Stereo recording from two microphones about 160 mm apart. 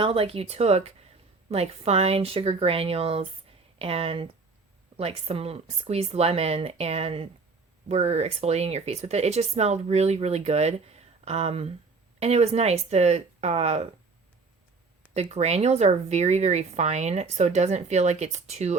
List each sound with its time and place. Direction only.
0.0 s speech: 35° right (ahead or behind)
15.1 s speech: 40° right (ahead or behind)